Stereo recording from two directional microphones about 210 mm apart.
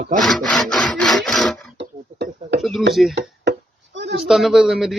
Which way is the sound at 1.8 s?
50° right (ahead or behind).